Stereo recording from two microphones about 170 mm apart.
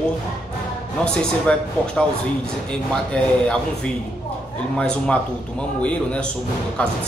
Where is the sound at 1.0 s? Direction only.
5° left (ahead or behind).